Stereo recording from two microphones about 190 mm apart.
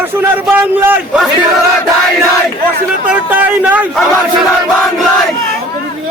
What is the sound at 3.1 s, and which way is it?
Speech, 10° right (ahead or behind).